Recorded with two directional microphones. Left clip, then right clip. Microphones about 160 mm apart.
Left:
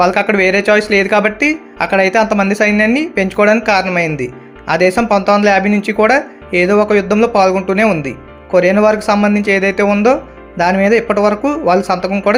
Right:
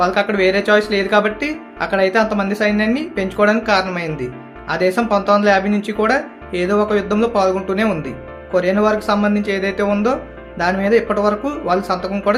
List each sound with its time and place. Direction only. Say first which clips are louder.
0.0 s speech: left 4 dB; 45° left (ahead or behind)